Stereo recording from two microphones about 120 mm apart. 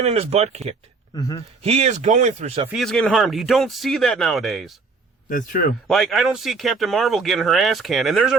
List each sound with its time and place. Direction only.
0.0 s speech: 60° right (ahead or behind)
1.1 s a man's voice: 35° left (ahead or behind)
1.6 s speech: 65° right (ahead or behind); by 2.5 s 85° right
2.7 s speech: 5° left (ahead or behind)
5.9 s speech: centre (ahead or behind)